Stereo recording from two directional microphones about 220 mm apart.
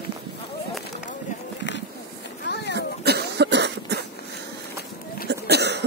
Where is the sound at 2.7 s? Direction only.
50° right (ahead or behind).